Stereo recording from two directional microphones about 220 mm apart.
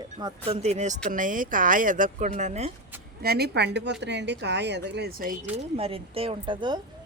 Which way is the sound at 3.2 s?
45° right (ahead or behind).